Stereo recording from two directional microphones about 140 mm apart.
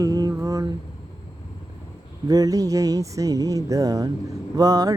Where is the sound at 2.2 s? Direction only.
25° right (ahead or behind).